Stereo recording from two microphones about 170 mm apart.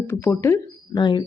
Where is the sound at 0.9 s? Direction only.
25° left (ahead or behind).